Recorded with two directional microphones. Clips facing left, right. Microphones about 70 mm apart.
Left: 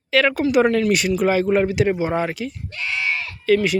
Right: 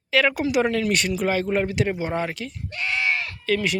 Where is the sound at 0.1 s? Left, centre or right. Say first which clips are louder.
Left 3 dB; centre.